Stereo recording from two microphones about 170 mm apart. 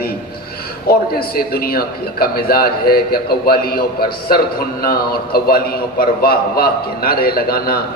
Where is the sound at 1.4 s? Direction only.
60° left (ahead or behind).